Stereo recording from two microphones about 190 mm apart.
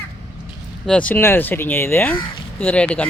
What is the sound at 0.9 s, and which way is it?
Speech, 5° left (ahead or behind).